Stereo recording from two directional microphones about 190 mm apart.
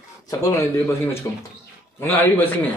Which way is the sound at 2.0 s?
10° left (ahead or behind).